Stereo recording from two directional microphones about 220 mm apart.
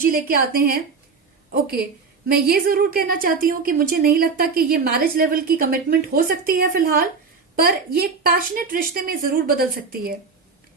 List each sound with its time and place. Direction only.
0.0 s a woman's voice: 40° right (ahead or behind)